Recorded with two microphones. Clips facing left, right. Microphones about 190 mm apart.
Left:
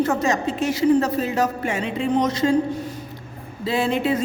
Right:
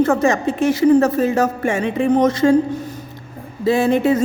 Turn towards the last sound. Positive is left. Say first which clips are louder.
# right 6 dB
turn(degrees=-45)  # may be behind; listen again after turning